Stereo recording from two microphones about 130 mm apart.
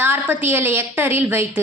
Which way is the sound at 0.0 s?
15° right (ahead or behind).